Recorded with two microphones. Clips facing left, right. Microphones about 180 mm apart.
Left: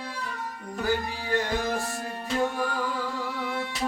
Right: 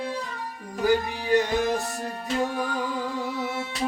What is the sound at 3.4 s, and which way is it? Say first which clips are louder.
Music: right 2 dB; 25° right (ahead or behind).